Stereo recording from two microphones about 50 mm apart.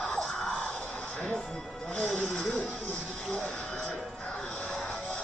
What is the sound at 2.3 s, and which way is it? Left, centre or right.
Music, centre.